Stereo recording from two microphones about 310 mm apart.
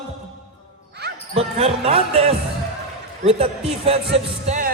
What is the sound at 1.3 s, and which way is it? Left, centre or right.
Speech, centre.